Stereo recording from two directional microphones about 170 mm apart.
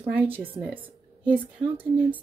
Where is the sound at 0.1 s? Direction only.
10° right (ahead or behind).